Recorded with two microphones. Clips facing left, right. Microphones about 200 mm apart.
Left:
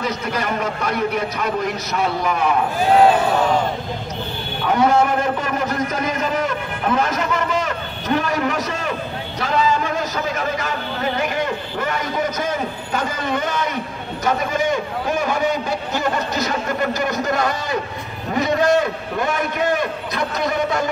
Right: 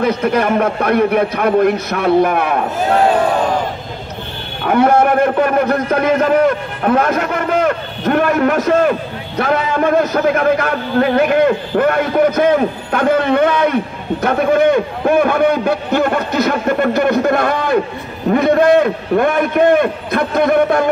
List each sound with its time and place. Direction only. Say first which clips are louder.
0.0 s a man's voice: right 9 dB; 60° right (ahead or behind)
4.6 s a man's voice: right 5 dB; 60° right (ahead or behind)